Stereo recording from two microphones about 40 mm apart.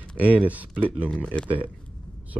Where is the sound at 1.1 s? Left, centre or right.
Left.